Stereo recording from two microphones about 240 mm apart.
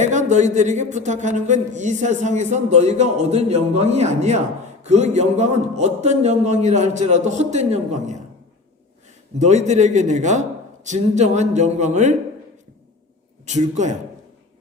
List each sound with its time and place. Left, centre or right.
0.0 s a man's voice: right
9.4 s a man's voice: right
13.4 s a man's voice: right